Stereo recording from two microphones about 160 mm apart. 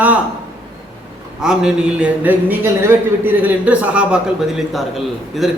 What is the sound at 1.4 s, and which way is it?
A man's voice, 5° right (ahead or behind).